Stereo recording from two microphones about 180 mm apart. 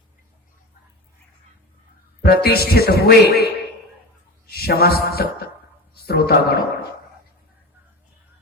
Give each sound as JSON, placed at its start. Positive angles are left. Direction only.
{"t": 2.2, "sound": "speech", "side_deg": 60}
{"t": 4.4, "sound": "mantra", "side_deg": 60}
{"t": 6.1, "sound": "speech", "side_deg": 60}